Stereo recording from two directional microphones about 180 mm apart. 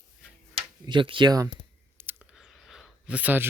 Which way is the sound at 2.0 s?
10° right (ahead or behind).